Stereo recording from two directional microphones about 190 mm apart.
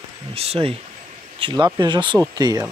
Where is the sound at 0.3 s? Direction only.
30° right (ahead or behind).